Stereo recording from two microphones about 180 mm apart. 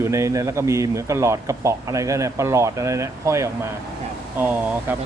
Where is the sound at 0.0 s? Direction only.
15° right (ahead or behind).